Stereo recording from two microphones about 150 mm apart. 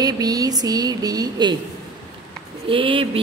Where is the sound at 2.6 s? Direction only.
35° right (ahead or behind).